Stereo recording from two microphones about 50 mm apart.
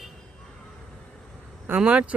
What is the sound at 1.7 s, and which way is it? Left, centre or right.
Speech, right.